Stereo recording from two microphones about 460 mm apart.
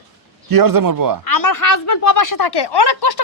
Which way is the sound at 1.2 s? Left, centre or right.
Left.